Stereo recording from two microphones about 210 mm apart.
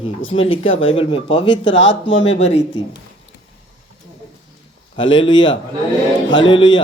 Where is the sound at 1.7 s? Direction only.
65° left (ahead or behind).